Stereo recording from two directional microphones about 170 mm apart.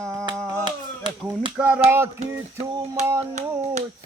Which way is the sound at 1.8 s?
15° right (ahead or behind).